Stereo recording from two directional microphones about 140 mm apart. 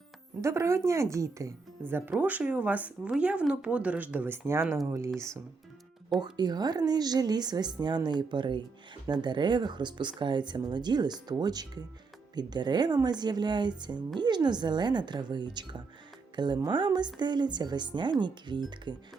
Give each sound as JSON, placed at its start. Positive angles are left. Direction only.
{"t": 0.4, "sound": "speech", "side_deg": -20}
{"t": 6.3, "sound": "speech", "side_deg": -30}